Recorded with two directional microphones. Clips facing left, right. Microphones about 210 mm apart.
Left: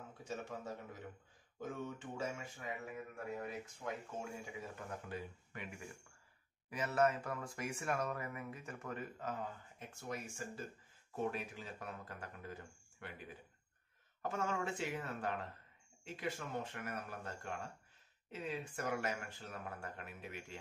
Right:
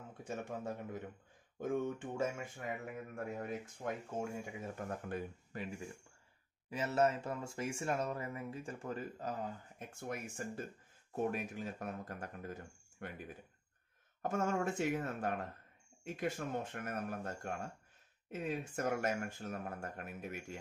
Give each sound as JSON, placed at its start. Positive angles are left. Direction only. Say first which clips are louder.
{"t": 0.3, "sound": "speech", "louder": "right 3 dB", "side_deg": -55}
{"t": 5.5, "sound": "speech", "louder": "right 6 dB", "side_deg": -35}
{"t": 6.7, "sound": "speech", "louder": "right 1 dB", "side_deg": -25}
{"t": 9.9, "sound": "speech", "louder": "right 2 dB", "side_deg": -55}